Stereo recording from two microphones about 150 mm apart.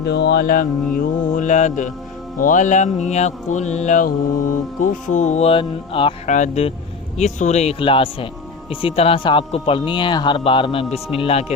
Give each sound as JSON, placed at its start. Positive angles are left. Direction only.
{"t": 0.0, "sound": "music", "side_deg": 90}
{"t": 0.9, "sound": "mantra", "side_deg": 55}
{"t": 6.2, "sound": "mantra", "side_deg": 55}
{"t": 8.7, "sound": "speech", "side_deg": 35}
{"t": 10.9, "sound": "mantra", "side_deg": 40}